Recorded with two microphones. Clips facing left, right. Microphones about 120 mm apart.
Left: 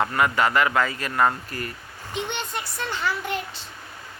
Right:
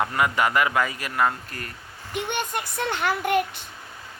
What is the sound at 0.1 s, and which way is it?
Speech, 15° right (ahead or behind).